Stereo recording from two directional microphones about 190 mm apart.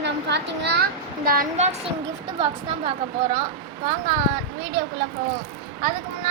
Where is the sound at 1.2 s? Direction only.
40° right (ahead or behind).